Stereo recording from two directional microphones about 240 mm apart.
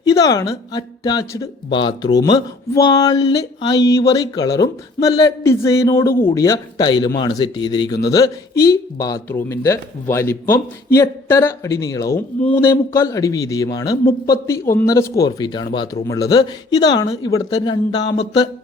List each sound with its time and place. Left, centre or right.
0.0 s speech: centre
18.0 s mantra: left